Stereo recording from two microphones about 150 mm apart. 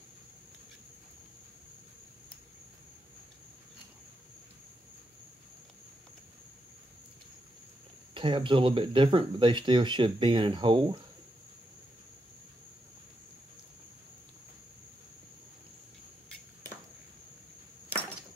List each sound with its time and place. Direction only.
8.1 s speech: 35° right (ahead or behind)